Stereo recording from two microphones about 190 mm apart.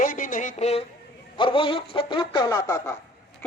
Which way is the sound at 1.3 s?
25° left (ahead or behind).